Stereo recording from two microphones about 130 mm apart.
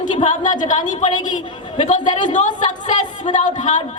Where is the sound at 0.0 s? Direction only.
70° left (ahead or behind).